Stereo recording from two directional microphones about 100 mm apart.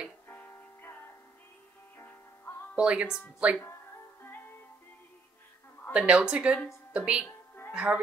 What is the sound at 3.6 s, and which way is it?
Music, 25° left (ahead or behind).